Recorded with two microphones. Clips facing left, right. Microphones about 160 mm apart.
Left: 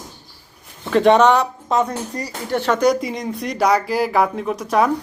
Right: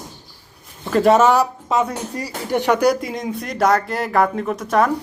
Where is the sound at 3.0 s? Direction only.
Centre (ahead or behind).